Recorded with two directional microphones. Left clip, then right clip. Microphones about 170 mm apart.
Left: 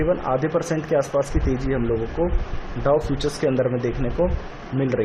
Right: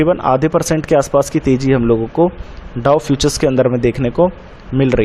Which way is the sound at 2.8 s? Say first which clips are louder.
Right 7 dB; 40° right (ahead or behind).